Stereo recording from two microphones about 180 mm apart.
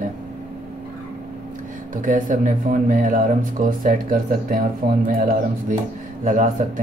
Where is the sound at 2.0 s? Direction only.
45° right (ahead or behind).